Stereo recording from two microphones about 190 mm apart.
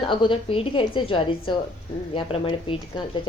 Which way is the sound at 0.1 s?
25° left (ahead or behind).